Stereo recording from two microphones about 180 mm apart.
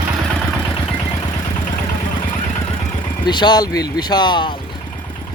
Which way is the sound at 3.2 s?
25° left (ahead or behind).